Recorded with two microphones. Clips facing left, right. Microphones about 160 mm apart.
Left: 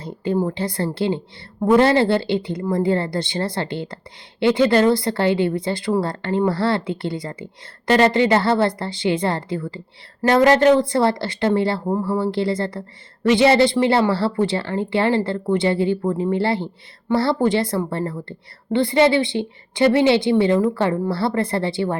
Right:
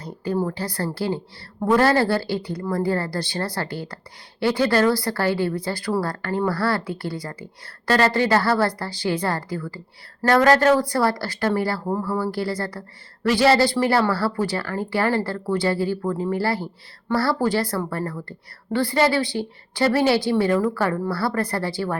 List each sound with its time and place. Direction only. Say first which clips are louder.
0.0 s speech: left 3 dB; 25° left (ahead or behind)